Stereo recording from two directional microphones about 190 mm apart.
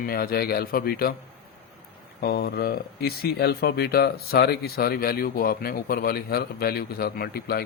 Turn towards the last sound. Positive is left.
turn(degrees=55)  # may be behind; listen again after turning